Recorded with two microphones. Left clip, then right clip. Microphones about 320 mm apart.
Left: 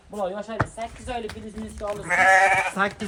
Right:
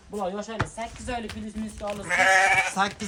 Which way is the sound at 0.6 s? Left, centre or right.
Centre.